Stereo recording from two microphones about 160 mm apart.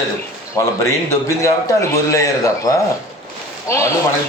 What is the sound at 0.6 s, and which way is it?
A man's voice, 20° left (ahead or behind).